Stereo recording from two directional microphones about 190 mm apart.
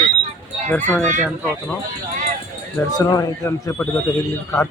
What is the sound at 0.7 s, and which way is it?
Speech, 10° left (ahead or behind).